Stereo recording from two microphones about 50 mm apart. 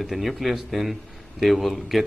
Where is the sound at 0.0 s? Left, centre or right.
Centre.